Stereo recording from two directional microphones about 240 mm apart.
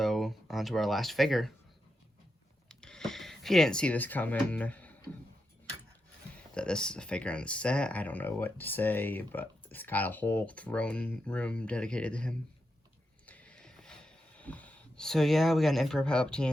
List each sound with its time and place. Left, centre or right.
0.0 s speech: centre
2.6 s speech: centre
6.5 s speech: centre
13.2 s snort: centre